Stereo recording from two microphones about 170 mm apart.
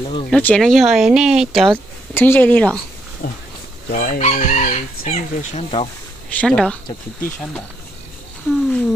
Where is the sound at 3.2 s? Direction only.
60° left (ahead or behind).